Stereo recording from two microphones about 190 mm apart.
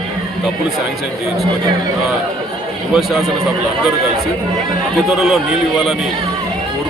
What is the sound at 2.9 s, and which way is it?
Speech, centre (ahead or behind).